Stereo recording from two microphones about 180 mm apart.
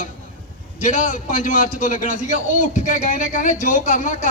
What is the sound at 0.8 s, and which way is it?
Speech, 45° left (ahead or behind).